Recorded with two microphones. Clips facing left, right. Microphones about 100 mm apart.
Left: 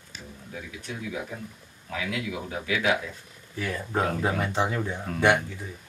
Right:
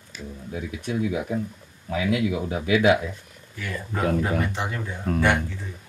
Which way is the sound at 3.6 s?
25° left (ahead or behind).